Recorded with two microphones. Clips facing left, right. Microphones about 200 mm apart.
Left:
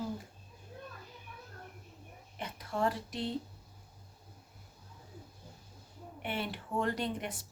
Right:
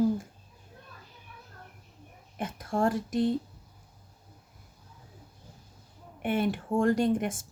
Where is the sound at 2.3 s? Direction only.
45° right (ahead or behind).